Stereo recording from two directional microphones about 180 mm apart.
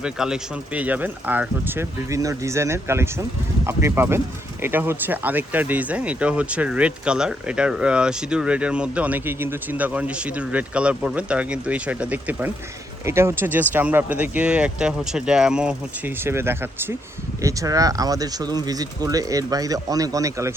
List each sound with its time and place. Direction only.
0.0 s speech: 5° right (ahead or behind)